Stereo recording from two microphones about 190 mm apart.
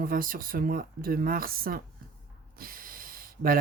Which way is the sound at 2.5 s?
50° right (ahead or behind).